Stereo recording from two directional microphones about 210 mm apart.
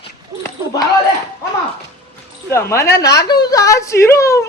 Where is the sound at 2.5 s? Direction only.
15° left (ahead or behind).